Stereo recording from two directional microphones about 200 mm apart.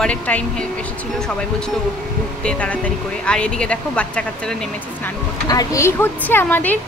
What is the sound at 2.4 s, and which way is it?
A woman's voice, 5° left (ahead or behind).